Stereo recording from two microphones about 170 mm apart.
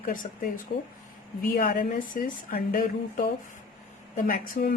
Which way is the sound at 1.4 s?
50° left (ahead or behind).